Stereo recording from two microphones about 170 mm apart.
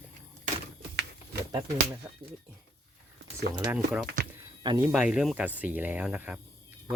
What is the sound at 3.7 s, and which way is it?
Speech, 5° right (ahead or behind).